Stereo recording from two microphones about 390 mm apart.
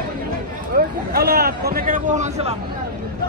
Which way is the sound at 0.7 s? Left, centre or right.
Right.